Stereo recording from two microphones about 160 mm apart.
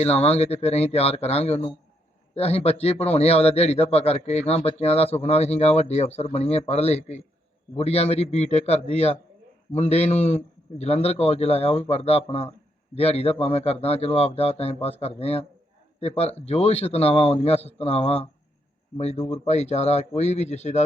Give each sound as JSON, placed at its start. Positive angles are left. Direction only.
{"t": 0.0, "sound": "a man's voice", "side_deg": 40}